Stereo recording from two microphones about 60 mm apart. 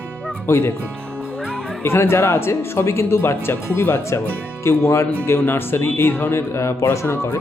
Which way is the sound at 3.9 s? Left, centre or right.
Left.